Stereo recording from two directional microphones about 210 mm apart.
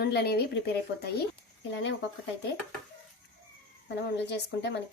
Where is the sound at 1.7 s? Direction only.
60° left (ahead or behind).